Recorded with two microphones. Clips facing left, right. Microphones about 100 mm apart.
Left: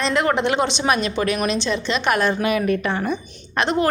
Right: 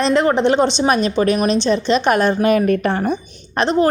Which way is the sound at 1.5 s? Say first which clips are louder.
Right 6 dB; 40° right (ahead or behind).